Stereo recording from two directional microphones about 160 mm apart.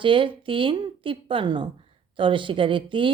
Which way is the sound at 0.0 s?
30° right (ahead or behind).